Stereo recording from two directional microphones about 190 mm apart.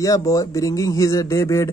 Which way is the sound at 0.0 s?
20° left (ahead or behind).